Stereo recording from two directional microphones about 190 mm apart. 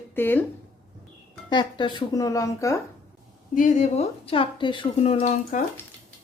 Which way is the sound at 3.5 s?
40° left (ahead or behind).